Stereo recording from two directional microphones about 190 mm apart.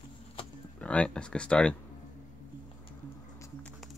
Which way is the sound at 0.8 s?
5° left (ahead or behind).